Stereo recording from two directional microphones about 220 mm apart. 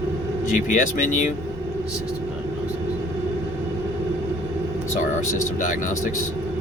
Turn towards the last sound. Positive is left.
turn(degrees=35)  # may be behind; listen again after turning